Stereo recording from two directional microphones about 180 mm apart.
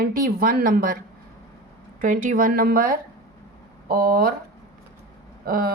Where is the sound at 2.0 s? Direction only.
50° right (ahead or behind).